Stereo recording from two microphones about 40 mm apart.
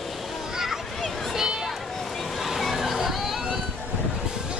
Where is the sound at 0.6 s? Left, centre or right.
Centre.